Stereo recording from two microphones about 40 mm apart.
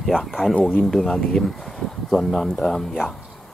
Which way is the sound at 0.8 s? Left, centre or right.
Centre.